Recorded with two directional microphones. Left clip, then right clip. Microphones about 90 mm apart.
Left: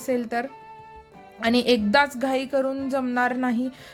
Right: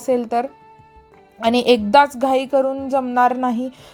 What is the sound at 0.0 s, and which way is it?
A woman's voice, 30° right (ahead or behind).